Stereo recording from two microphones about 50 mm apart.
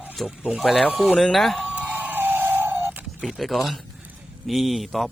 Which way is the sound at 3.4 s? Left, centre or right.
Centre.